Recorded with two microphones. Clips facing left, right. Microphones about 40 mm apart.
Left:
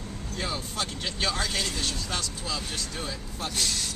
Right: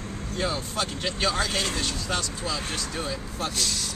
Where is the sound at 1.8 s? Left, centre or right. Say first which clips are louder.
Right 3 dB; centre.